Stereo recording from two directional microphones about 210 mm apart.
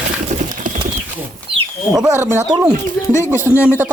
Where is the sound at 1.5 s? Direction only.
20° right (ahead or behind).